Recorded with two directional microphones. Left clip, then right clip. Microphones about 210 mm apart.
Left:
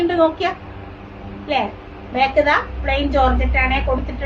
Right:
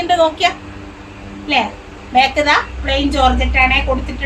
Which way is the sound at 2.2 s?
15° left (ahead or behind).